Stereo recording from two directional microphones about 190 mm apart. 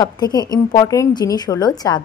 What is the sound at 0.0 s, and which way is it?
A woman's voice, 20° left (ahead or behind).